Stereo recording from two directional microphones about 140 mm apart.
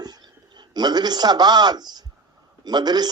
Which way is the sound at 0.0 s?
30° right (ahead or behind).